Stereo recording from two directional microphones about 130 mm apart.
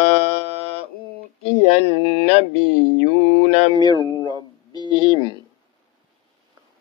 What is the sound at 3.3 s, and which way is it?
Speech, 50° left (ahead or behind).